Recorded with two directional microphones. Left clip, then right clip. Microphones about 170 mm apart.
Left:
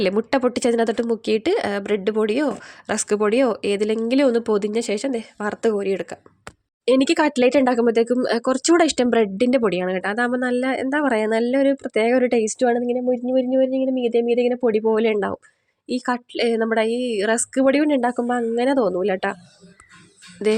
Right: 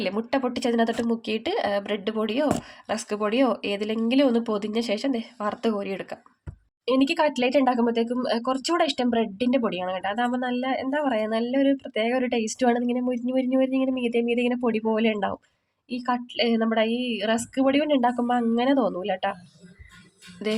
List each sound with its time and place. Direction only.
0.0 s speech: 55° left (ahead or behind)
15.9 s speech: 55° left (ahead or behind)
20.4 s speech: 45° left (ahead or behind)